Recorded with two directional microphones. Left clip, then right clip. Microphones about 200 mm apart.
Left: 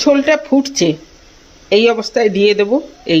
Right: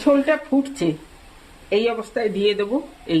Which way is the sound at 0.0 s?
30° left (ahead or behind).